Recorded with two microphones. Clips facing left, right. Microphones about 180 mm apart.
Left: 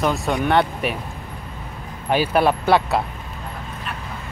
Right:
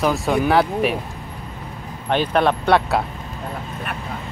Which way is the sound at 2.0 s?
5° left (ahead or behind).